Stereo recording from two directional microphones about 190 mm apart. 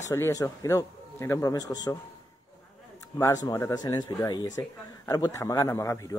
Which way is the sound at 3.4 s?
20° left (ahead or behind).